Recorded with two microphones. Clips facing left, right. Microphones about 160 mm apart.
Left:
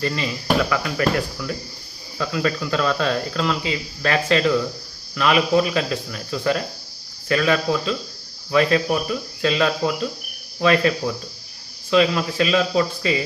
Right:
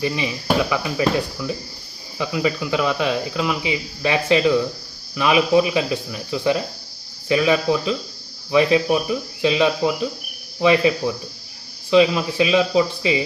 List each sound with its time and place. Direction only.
0.0 s speech: 10° right (ahead or behind)